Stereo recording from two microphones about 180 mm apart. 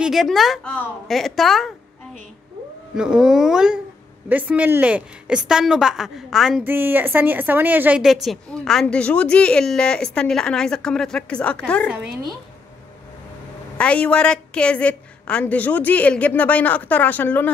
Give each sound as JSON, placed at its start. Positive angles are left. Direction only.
{"t": 0.0, "sound": "a woman's voice", "side_deg": 0}
{"t": 3.0, "sound": "a woman's voice", "side_deg": -5}
{"t": 11.9, "sound": "a woman's voice", "side_deg": -5}
{"t": 13.7, "sound": "a woman's voice", "side_deg": 5}